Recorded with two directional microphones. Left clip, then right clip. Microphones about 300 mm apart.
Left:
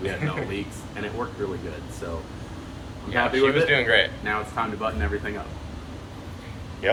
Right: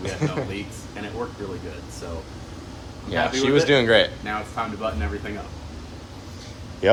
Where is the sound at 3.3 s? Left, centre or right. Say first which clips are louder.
Right 2 dB; centre.